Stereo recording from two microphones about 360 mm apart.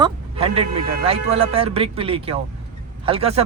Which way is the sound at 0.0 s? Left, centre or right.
Centre.